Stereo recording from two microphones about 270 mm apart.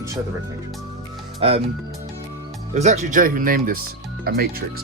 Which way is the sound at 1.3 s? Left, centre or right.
Right.